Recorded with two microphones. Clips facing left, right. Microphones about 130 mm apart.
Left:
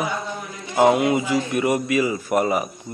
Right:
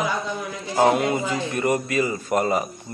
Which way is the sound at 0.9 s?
15° left (ahead or behind).